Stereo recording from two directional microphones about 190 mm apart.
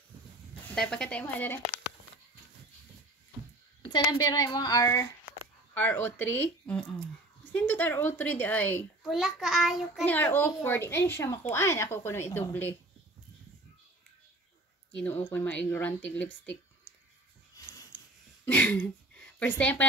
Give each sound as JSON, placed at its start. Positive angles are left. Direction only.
{"t": 0.7, "sound": "a child's voice", "side_deg": 5}
{"t": 3.9, "sound": "a woman's voice", "side_deg": 20}
{"t": 10.0, "sound": "a child's voice", "side_deg": 10}
{"t": 15.0, "sound": "a child's voice", "side_deg": 10}
{"t": 17.9, "sound": "throat clearing", "side_deg": -5}
{"t": 18.5, "sound": "speech", "side_deg": 10}